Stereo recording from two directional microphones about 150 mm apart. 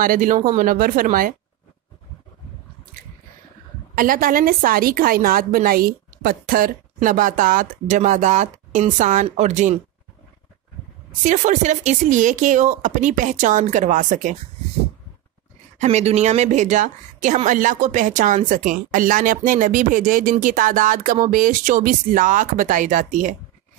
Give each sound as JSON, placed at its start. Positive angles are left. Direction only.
{"t": 0.0, "sound": "a woman's voice", "side_deg": -65}
{"t": 3.9, "sound": "a woman's voice", "side_deg": -70}
{"t": 11.2, "sound": "a woman's voice", "side_deg": -55}
{"t": 15.8, "sound": "a woman's voice", "side_deg": -45}